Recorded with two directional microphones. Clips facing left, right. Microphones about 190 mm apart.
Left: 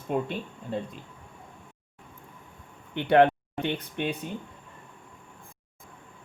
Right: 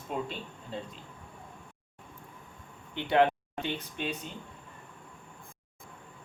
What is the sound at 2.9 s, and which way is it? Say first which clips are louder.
Speech: left 5 dB; 60° left (ahead or behind).